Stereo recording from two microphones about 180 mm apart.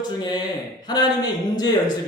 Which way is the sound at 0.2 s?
25° left (ahead or behind).